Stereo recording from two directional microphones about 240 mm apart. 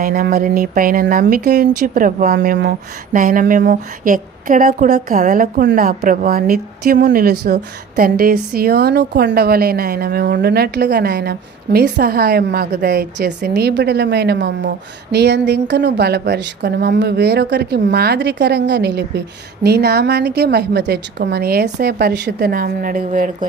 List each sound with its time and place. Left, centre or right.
0.0 s a woman's voice: right